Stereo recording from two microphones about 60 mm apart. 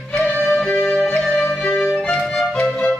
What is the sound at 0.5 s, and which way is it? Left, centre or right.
Music, centre.